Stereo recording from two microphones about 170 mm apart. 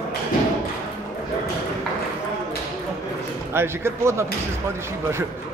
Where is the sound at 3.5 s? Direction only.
15° right (ahead or behind).